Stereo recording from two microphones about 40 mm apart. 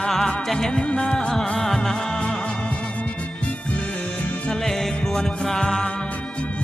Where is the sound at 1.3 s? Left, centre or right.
Centre.